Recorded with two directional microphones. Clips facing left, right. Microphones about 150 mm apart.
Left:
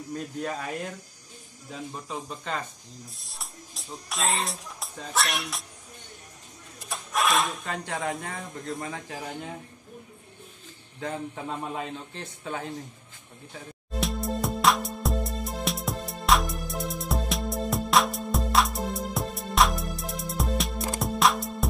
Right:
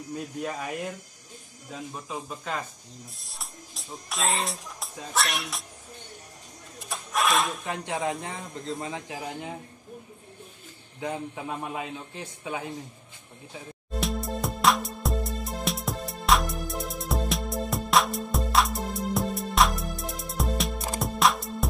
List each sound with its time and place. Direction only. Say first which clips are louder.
0.1 s a man's voice: left 1 dB; 10° right (ahead or behind)
6.8 s a sound: even; centre (ahead or behind)
7.6 s speech: right 2 dB; 20° right (ahead or behind)
11.0 s a man's voice: right 1 dB; 10° right (ahead or behind)
13.9 s music: left 1 dB; centre (ahead or behind)